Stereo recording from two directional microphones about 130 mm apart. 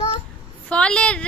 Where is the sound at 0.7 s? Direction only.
10° left (ahead or behind).